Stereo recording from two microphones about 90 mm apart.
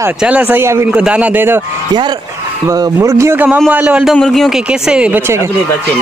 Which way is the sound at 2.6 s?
40° right (ahead or behind).